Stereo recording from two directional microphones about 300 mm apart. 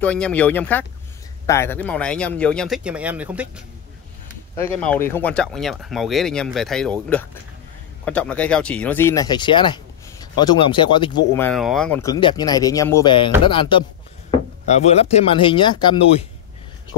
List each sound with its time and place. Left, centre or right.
0.0 s speech: centre